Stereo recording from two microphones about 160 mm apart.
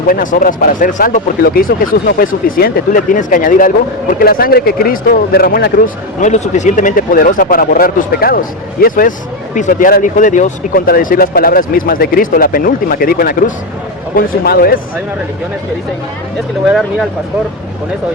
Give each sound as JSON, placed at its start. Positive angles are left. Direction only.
{"t": 0.1, "sound": "speech", "side_deg": 60}
{"t": 4.1, "sound": "a man's voice", "side_deg": 70}
{"t": 16.6, "sound": "speech", "side_deg": 0}